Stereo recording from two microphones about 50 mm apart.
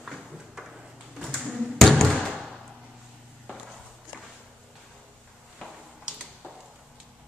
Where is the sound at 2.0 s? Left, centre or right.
Centre.